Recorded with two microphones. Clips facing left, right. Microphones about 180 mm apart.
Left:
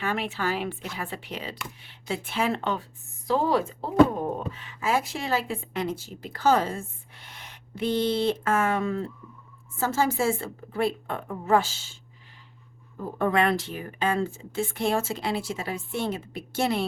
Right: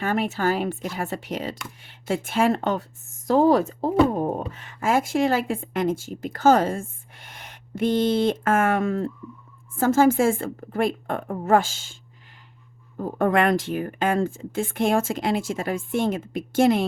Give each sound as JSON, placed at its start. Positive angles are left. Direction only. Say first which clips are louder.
{"t": 0.0, "sound": "speech", "louder": "right 5 dB", "side_deg": -45}
{"t": 13.0, "sound": "speech", "louder": "right 3 dB", "side_deg": -50}